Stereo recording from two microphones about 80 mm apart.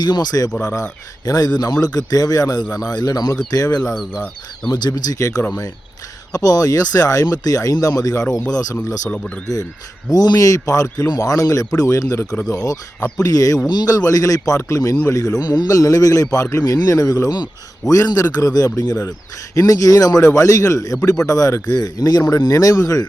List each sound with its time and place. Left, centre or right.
0.0 s a man's voice: left
5.1 s speech: left
6.3 s a man's voice: left
9.0 s speech: centre
10.1 s a man's voice: left
13.7 s speech: left
13.9 s a man's voice: left
15.4 s a man's voice: left